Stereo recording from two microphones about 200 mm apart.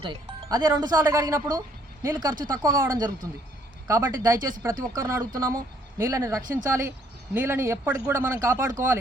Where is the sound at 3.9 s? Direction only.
15° right (ahead or behind).